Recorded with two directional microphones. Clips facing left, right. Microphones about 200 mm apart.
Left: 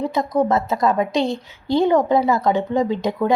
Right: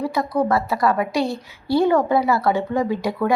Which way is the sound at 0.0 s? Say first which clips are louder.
Left 2 dB; 20° left (ahead or behind).